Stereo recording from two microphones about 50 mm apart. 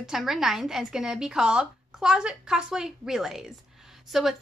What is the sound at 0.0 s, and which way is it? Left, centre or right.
A woman's voice, centre.